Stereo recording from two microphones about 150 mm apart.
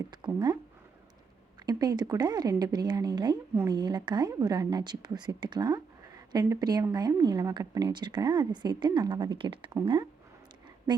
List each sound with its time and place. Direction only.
0.3 s a woman's voice: 25° right (ahead or behind)
1.6 s a woman's voice: 25° right (ahead or behind)